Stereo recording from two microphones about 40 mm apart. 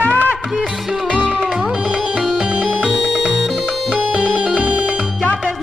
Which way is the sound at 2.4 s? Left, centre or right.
Right.